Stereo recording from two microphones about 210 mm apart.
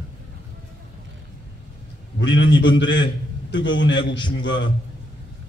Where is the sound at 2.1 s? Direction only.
60° left (ahead or behind).